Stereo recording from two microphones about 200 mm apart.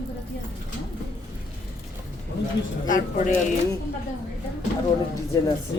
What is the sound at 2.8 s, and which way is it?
Speech, 40° left (ahead or behind).